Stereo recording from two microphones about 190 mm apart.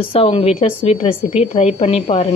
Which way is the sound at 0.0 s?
30° left (ahead or behind).